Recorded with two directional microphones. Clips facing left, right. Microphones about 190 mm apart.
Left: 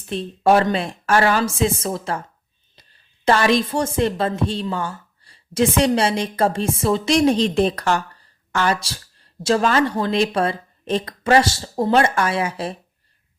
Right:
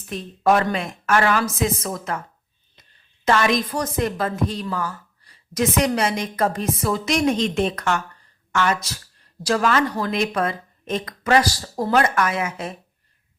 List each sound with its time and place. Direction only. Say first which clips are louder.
0.1 s speech: left 3 dB; 30° left (ahead or behind)
2.8 s a sound: left 2 dB; 35° left (ahead or behind)
3.2 s a woman's voice: left 3 dB; 30° left (ahead or behind)